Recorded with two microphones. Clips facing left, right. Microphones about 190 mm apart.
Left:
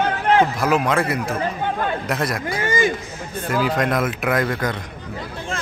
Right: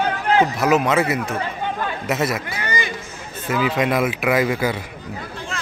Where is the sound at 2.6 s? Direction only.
45° left (ahead or behind).